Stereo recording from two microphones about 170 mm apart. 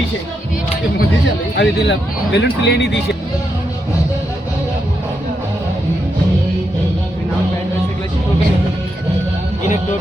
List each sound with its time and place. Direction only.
1.5 s a man's voice: 85° left